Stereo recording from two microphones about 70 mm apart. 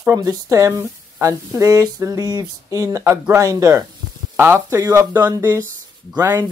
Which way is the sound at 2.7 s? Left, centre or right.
Right.